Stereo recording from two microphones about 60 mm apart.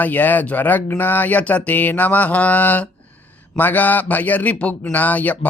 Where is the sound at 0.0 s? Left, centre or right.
Left.